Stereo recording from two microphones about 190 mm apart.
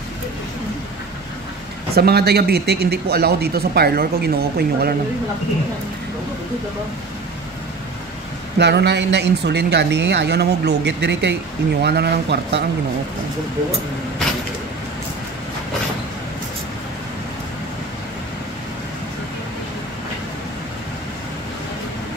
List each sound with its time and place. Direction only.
2.0 s speech: 55° right (ahead or behind)
8.5 s speech: 65° right (ahead or behind)